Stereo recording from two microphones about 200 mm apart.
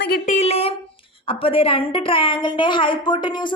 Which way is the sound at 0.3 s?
35° left (ahead or behind).